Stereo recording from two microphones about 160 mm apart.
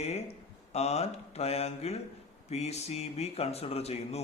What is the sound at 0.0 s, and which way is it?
Speech, 40° left (ahead or behind).